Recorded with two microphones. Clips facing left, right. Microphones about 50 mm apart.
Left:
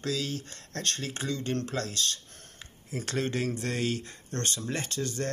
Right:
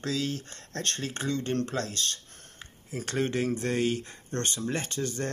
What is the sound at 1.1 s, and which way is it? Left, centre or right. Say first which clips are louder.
Speech: right 3 dB; right.